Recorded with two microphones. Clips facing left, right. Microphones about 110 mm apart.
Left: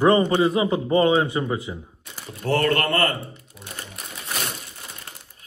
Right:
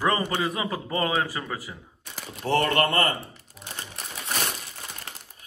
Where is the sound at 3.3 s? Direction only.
30° right (ahead or behind).